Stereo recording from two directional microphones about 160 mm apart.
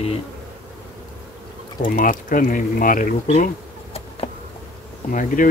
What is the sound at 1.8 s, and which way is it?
Speech, 60° left (ahead or behind).